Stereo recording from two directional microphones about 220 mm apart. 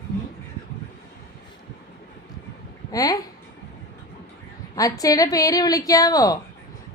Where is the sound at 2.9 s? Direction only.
15° left (ahead or behind).